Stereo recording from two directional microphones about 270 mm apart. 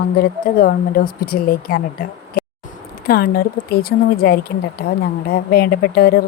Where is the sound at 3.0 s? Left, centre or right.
Left.